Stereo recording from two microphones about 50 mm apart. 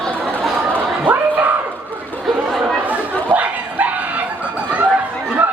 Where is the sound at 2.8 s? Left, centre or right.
Right.